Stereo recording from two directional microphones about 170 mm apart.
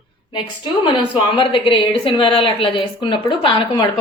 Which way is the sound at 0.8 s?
30° left (ahead or behind).